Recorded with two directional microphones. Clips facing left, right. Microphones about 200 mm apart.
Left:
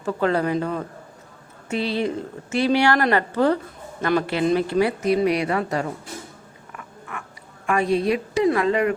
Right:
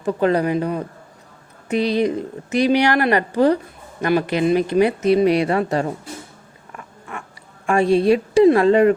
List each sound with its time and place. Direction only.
0.0 s speech: 15° right (ahead or behind)
7.7 s a woman's voice: 30° right (ahead or behind)